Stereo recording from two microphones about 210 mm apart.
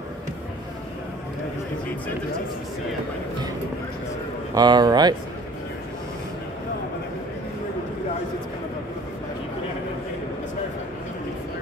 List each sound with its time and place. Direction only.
4.6 s speech: 20° right (ahead or behind)